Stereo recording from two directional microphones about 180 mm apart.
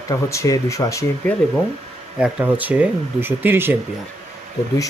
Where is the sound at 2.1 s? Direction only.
5° right (ahead or behind).